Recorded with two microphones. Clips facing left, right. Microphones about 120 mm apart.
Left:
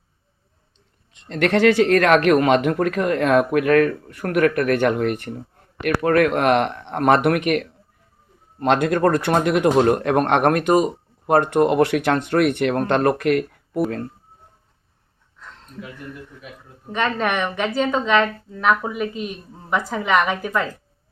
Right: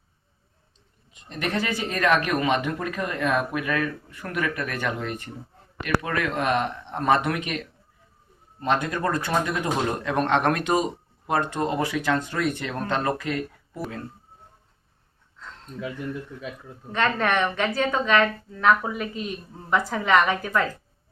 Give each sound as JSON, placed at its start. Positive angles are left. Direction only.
{"t": 1.3, "sound": "speech", "side_deg": 90}
{"t": 8.5, "sound": "speech", "side_deg": 75}
{"t": 9.7, "sound": "speech", "side_deg": 60}
{"t": 16.9, "sound": "a woman's voice", "side_deg": 15}